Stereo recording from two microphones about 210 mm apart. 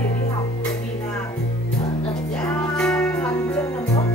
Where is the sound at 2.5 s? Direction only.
5° left (ahead or behind).